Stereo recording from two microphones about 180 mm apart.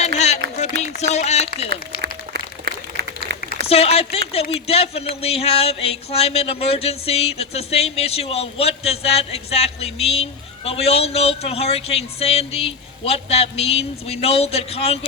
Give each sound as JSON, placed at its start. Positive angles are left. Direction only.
{"t": 0.8, "sound": "run", "side_deg": 40}
{"t": 2.0, "sound": "applause", "side_deg": -60}
{"t": 3.7, "sound": "speech", "side_deg": 35}